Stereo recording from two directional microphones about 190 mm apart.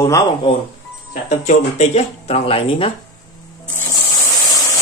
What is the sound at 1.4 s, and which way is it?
Speech, 35° left (ahead or behind).